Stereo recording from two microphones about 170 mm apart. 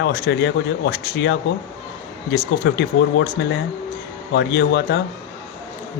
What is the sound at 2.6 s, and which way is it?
Speech, 90° left.